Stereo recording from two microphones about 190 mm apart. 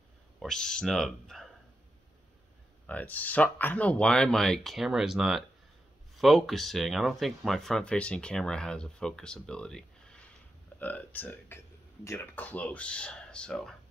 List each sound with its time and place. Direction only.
0.4 s speech: 5° left (ahead or behind)
2.9 s speech: 10° left (ahead or behind)